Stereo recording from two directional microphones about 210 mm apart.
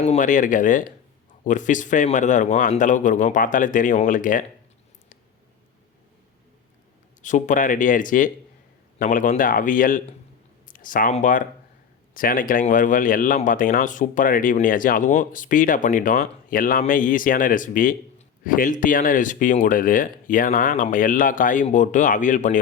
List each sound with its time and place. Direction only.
0.0 s speech: 35° left (ahead or behind)
7.2 s speech: 35° left (ahead or behind)